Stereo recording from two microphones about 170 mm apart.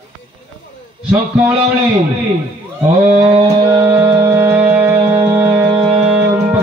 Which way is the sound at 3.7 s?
10° right (ahead or behind).